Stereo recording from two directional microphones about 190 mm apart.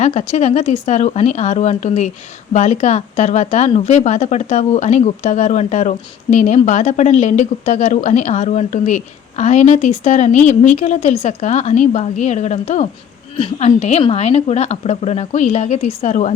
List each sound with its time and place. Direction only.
0.0 s a woman's voice: 35° left (ahead or behind)